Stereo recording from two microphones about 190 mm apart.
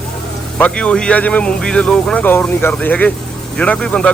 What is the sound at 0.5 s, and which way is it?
A man's voice, 5° left (ahead or behind).